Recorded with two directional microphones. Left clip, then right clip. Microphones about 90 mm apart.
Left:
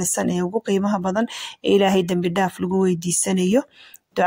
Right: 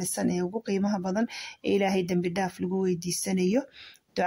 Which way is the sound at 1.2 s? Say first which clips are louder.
Left 7 dB; 40° left (ahead or behind).